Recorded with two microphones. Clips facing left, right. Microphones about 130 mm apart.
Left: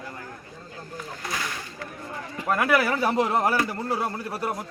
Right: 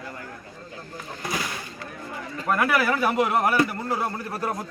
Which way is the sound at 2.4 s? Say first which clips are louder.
Even; 20° left (ahead or behind).